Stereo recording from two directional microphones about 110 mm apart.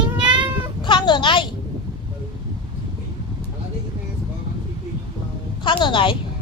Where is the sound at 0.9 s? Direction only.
45° left (ahead or behind).